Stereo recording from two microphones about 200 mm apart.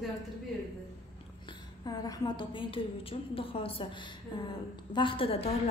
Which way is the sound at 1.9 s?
20° left (ahead or behind).